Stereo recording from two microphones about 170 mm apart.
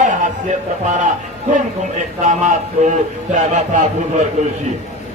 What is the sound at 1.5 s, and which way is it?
A man's voice, 45° right (ahead or behind).